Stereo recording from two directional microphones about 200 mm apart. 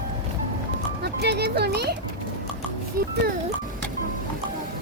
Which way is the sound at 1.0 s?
55° right (ahead or behind).